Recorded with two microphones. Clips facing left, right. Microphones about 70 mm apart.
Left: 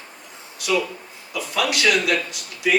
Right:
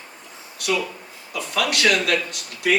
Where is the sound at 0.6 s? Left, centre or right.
Right.